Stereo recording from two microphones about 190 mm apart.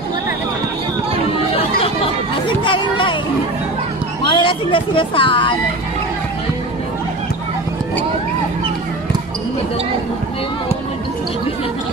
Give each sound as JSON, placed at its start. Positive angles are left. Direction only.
{"t": 2.6, "sound": "music", "side_deg": 25}
{"t": 4.3, "sound": "speech", "side_deg": 25}